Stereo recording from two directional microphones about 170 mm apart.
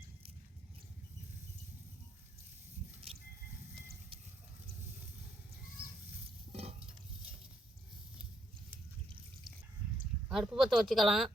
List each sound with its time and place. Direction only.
6.5 s stir: 35° right (ahead or behind)
10.2 s speech: 5° right (ahead or behind)